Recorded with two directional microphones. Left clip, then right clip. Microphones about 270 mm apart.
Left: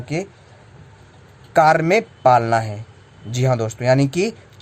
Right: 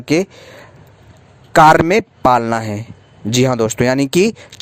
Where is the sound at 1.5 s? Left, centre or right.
Right.